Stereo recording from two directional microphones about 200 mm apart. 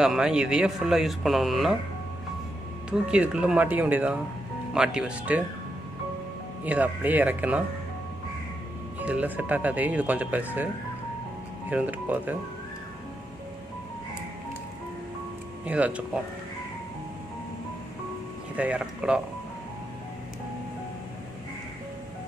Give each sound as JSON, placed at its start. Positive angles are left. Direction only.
{"t": 0.0, "sound": "speech", "side_deg": -5}
{"t": 2.9, "sound": "speech", "side_deg": -5}
{"t": 6.6, "sound": "speech", "side_deg": -10}
{"t": 9.0, "sound": "speech", "side_deg": -5}
{"t": 11.7, "sound": "speech", "side_deg": -10}
{"t": 15.6, "sound": "speech", "side_deg": -5}
{"t": 18.6, "sound": "speech", "side_deg": -5}